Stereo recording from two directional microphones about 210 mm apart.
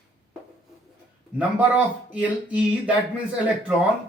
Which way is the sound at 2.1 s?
5° right (ahead or behind).